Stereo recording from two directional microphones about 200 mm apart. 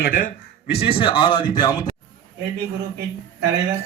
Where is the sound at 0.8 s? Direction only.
25° left (ahead or behind).